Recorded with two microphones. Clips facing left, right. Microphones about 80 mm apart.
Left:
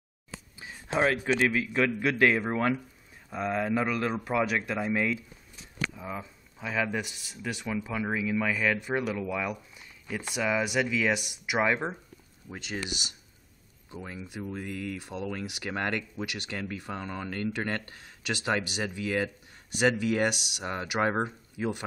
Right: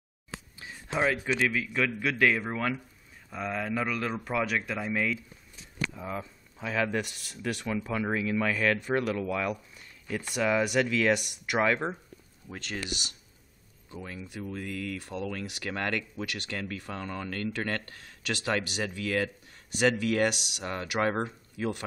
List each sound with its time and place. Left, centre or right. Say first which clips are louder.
0.6 s speech: left 2 dB; left
3.3 s speech: left 4 dB; centre
11.6 s speech: even; centre